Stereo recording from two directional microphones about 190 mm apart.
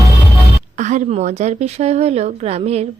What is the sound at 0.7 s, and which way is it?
A woman's voice, 40° right (ahead or behind).